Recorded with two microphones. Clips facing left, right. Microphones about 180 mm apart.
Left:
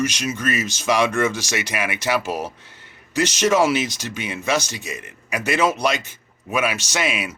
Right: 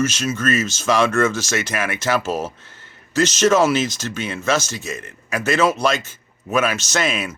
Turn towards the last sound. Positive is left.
turn(degrees=10)  # may be behind; listen again after turning